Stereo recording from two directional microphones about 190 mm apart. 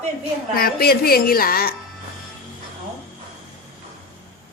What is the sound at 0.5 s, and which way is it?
Speech, 55° left (ahead or behind).